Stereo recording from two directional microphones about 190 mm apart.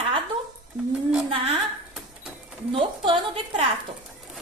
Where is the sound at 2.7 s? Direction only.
25° right (ahead or behind).